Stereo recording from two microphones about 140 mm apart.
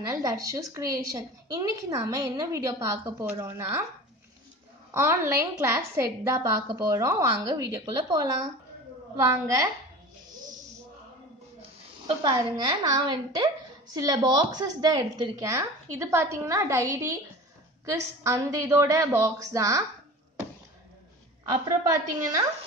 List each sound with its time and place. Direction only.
0.0 s a woman's voice: 25° right (ahead or behind)
4.9 s a woman's voice: 15° right (ahead or behind)
12.2 s a woman's voice: 30° right (ahead or behind)
21.6 s a woman's voice: 25° right (ahead or behind)